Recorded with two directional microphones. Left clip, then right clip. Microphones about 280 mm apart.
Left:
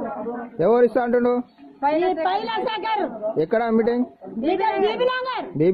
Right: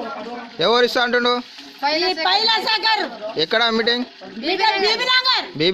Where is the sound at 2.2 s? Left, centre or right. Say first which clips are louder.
Right 5 dB; centre.